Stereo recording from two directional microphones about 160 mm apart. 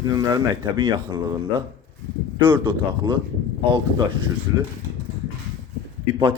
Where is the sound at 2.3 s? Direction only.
30° right (ahead or behind).